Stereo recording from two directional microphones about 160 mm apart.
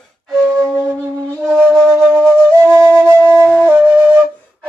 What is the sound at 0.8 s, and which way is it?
Wind instrument, 15° right (ahead or behind).